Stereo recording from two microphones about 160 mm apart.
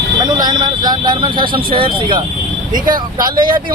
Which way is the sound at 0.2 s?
25° right (ahead or behind).